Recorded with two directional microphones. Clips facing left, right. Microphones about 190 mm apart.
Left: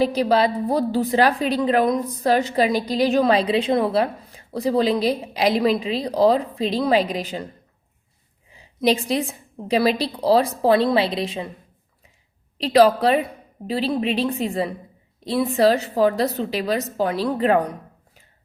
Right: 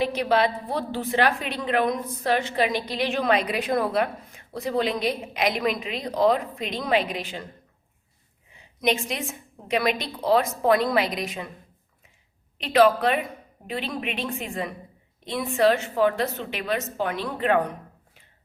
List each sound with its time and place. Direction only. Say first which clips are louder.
0.0 s a woman's voice: left 4 dB; 35° left (ahead or behind)
8.4 s a woman's voice: left 5 dB; 35° left (ahead or behind)
12.5 s a woman's voice: left 3 dB; 35° left (ahead or behind)